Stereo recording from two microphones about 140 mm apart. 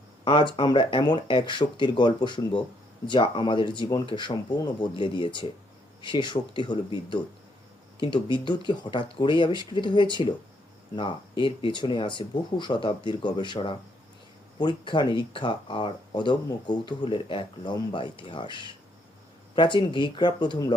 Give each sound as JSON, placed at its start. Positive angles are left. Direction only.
{"t": 0.5, "sound": "speech", "side_deg": 35}